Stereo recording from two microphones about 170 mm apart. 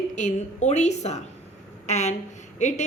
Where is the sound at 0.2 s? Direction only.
45° left (ahead or behind).